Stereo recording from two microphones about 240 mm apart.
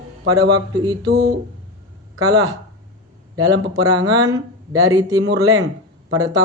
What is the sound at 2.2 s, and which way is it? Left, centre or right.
Speech, centre.